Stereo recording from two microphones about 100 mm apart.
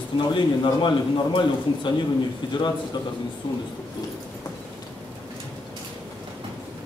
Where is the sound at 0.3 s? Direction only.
55° left (ahead or behind).